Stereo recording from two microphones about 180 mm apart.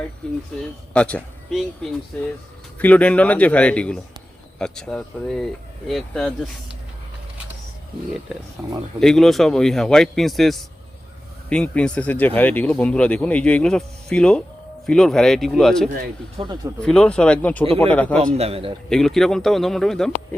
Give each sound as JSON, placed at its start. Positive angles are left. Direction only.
{"t": 0.2, "sound": "a man's voice", "side_deg": 5}
{"t": 9.0, "sound": "a man's voice", "side_deg": 0}
{"t": 16.4, "sound": "a man's voice", "side_deg": -30}
{"t": 16.8, "sound": "a man's voice", "side_deg": 5}
{"t": 18.3, "sound": "a man's voice", "side_deg": -35}
{"t": 18.9, "sound": "a man's voice", "side_deg": 0}